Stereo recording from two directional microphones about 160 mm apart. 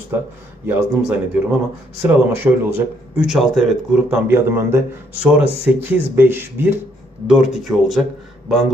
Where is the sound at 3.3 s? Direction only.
Centre (ahead or behind).